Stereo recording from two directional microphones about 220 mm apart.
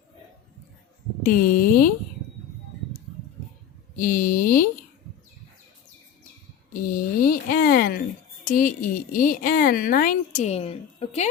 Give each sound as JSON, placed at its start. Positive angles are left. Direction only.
{"t": 1.2, "sound": "speech", "side_deg": 40}
{"t": 3.9, "sound": "speech", "side_deg": 35}
{"t": 6.7, "sound": "speech", "side_deg": 40}